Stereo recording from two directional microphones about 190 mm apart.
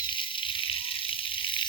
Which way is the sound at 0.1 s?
25° left (ahead or behind).